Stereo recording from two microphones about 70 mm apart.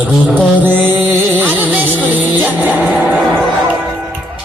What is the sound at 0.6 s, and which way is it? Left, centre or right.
Music, right.